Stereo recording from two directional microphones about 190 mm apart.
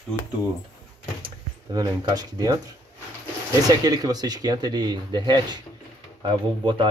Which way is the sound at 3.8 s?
20° right (ahead or behind).